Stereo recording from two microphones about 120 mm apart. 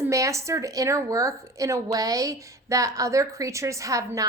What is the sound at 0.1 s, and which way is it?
Speech, 25° right (ahead or behind).